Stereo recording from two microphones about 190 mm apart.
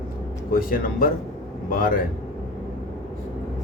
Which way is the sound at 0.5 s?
50° left (ahead or behind).